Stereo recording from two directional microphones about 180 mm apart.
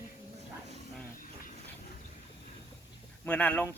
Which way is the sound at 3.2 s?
5° left (ahead or behind).